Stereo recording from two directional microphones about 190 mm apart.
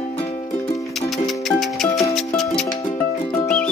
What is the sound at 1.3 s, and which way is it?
Music, centre (ahead or behind).